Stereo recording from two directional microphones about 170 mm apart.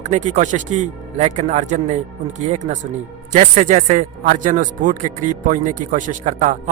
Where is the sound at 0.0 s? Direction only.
45° right (ahead or behind).